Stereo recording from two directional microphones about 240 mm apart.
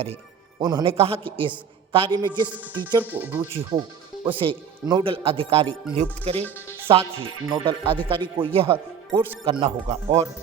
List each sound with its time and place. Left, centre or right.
0.6 s a woman's voice: centre